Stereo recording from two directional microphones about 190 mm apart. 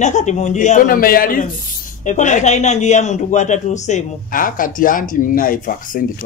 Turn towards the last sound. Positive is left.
turn(degrees=45)  # may be behind; listen again after turning